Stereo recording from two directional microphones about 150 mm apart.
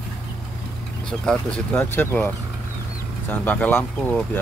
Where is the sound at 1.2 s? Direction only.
5° left (ahead or behind).